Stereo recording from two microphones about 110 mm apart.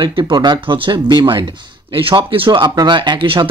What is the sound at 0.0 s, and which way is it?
Speech, 45° right (ahead or behind).